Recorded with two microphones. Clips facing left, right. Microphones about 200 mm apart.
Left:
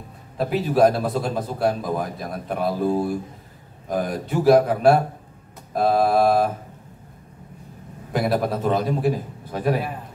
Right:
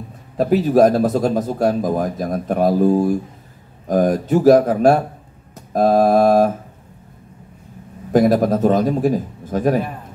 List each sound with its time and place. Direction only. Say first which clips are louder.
0.4 s a man's voice: right 5 dB; 45° right (ahead or behind)
8.1 s a man's voice: right 8 dB; 45° right (ahead or behind)